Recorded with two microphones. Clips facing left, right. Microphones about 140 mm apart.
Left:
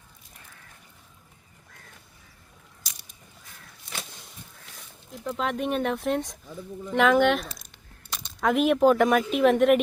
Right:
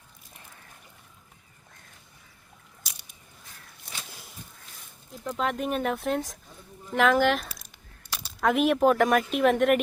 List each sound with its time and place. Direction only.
5.2 s speech: centre (ahead or behind)